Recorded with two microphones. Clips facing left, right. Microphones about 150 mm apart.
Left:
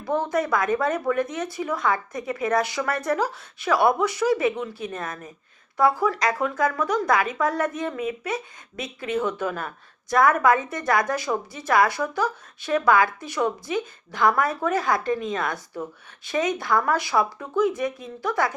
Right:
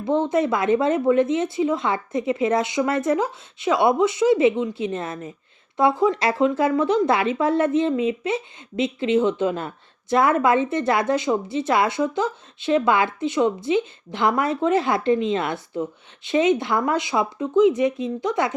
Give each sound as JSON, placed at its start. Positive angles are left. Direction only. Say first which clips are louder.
{"t": 0.0, "sound": "speech", "louder": "right 4 dB", "side_deg": -25}